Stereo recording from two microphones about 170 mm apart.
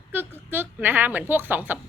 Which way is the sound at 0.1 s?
10° right (ahead or behind).